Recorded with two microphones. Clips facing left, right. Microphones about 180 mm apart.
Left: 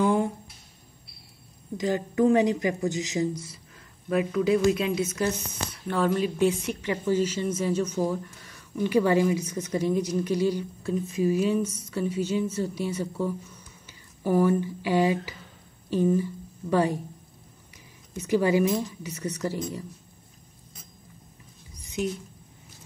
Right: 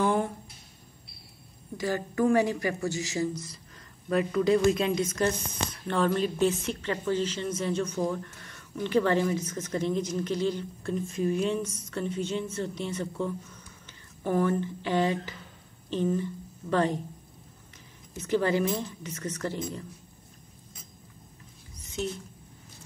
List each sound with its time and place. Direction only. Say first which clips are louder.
0.0 s a sound: left 3 dB; 15° left (ahead or behind)
1.8 s a woman's voice: left 3 dB; 20° left (ahead or behind)
4.1 s speech: left 1 dB; 5° left (ahead or behind)
18.1 s speech: left 3 dB; 10° left (ahead or behind)